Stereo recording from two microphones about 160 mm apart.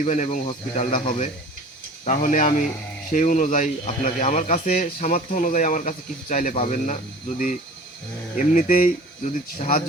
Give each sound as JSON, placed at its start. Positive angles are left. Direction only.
{"t": 0.0, "sound": "speech", "side_deg": 45}
{"t": 4.9, "sound": "speech", "side_deg": 50}